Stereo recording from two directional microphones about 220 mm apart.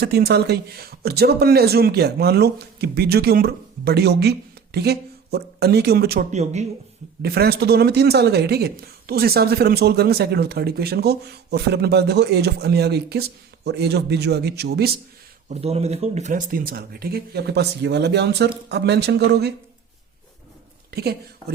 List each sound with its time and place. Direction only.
0.0 s speech: 45° right (ahead or behind)
6.3 s speech: 30° right (ahead or behind)
7.2 s speech: 45° right (ahead or behind)
15.4 s speech: 30° right (ahead or behind); by 19.5 s 50° right (ahead or behind)
20.9 s a woman's voice: 45° right (ahead or behind)